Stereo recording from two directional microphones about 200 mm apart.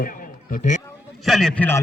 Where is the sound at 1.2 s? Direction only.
Centre (ahead or behind).